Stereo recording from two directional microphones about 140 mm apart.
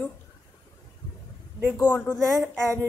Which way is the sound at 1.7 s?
15° left (ahead or behind).